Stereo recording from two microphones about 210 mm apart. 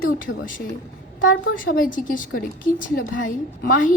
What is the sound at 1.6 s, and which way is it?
A woman's voice, 40° left (ahead or behind).